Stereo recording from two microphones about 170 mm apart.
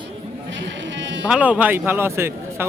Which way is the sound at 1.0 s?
90° right.